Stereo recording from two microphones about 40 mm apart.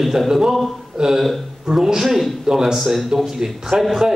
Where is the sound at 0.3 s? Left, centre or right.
Centre.